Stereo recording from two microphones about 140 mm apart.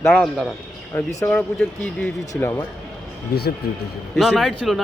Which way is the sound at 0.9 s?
20° left (ahead or behind).